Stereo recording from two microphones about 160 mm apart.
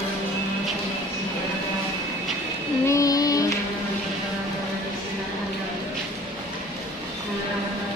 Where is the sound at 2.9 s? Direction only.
20° left (ahead or behind).